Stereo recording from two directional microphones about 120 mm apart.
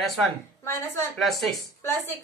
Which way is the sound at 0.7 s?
20° left (ahead or behind).